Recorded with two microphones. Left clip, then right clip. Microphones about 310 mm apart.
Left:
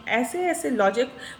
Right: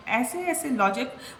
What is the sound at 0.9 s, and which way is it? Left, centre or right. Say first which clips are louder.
Speech: left 5 dB; centre.